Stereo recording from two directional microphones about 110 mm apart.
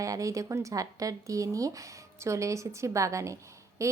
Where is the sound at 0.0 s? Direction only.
30° right (ahead or behind).